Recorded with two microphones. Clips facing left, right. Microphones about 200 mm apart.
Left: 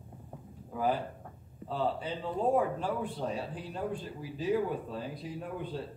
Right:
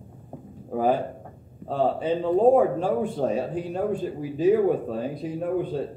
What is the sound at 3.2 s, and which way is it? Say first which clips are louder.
Speech: right 10 dB; 75° right (ahead or behind).